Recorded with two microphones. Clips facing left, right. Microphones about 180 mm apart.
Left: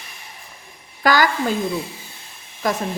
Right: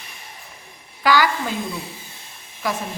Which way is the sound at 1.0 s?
45° left (ahead or behind).